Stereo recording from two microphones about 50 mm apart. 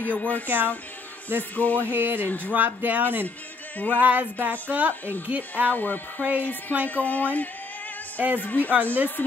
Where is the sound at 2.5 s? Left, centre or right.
Right.